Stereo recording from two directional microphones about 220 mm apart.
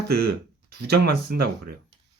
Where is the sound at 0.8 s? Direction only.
45° right (ahead or behind).